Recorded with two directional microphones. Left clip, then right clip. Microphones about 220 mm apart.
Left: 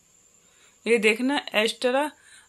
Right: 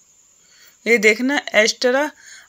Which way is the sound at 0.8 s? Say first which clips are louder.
Right 6 dB; 15° right (ahead or behind).